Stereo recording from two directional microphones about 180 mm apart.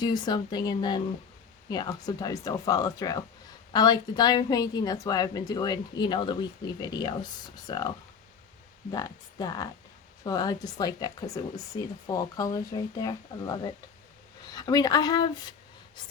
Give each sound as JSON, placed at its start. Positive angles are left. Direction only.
{"t": 0.0, "sound": "speech", "side_deg": 20}